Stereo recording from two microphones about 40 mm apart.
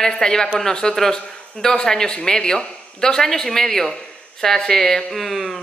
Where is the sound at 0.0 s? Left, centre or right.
Centre.